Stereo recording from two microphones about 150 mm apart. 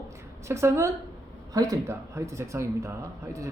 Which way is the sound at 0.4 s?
20° right (ahead or behind).